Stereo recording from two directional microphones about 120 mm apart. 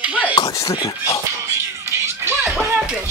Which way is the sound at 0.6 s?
30° left (ahead or behind).